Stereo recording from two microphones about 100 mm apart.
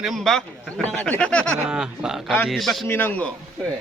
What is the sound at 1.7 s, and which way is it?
A man's voice, 10° right (ahead or behind).